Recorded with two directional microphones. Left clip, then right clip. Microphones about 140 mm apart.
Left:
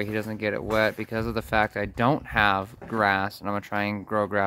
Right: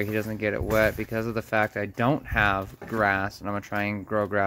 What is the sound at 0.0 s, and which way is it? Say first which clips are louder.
Speech: right 1 dB; 5° left (ahead or behind).